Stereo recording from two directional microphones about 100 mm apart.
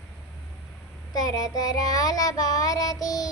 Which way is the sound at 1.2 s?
40° left (ahead or behind).